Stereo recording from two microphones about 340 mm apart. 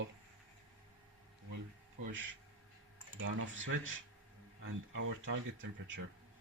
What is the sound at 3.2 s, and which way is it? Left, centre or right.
Speech, right.